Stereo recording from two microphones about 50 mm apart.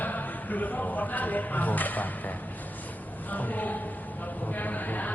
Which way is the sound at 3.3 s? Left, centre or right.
Left.